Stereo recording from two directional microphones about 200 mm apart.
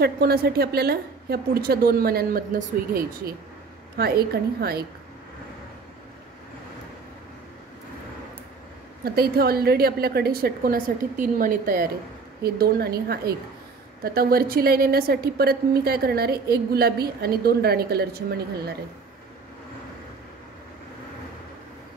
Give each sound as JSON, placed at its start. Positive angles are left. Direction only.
{"t": 0.0, "sound": "a woman's voice", "side_deg": -50}
{"t": 9.0, "sound": "a woman's voice", "side_deg": -50}